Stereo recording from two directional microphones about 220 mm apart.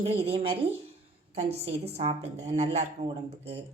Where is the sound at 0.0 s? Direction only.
25° right (ahead or behind).